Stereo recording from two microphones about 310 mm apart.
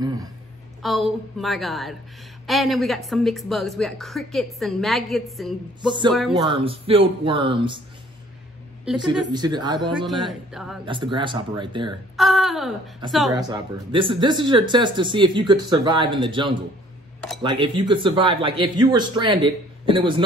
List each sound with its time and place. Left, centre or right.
0.0 s a sound: centre
0.8 s a woman's voice: centre
6.3 s speech: centre
8.9 s speech: centre
9.8 s a woman's voice: centre
10.9 s speech: centre
12.2 s a woman's voice: centre
13.3 s speech: centre